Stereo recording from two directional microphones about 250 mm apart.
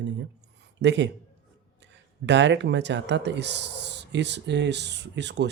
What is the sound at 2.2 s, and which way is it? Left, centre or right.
Speech, right.